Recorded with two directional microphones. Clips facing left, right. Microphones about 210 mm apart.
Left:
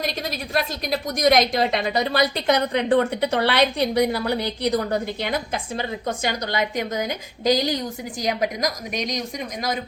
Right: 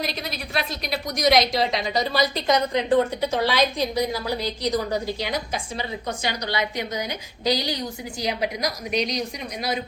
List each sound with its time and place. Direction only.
0.2 s a woman's voice: 45° left (ahead or behind)